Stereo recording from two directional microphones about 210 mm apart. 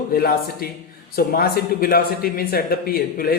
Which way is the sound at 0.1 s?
45° left (ahead or behind).